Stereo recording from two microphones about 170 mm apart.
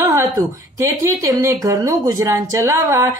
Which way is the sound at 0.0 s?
15° right (ahead or behind).